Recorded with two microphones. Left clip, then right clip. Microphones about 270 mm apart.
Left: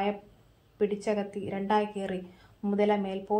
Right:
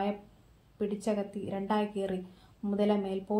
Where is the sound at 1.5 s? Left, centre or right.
Centre.